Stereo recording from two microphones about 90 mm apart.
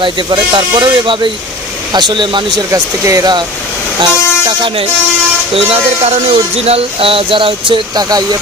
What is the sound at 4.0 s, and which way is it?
Speech, 55° right (ahead or behind).